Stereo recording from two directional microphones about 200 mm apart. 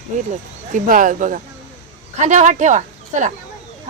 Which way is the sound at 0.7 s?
40° right (ahead or behind).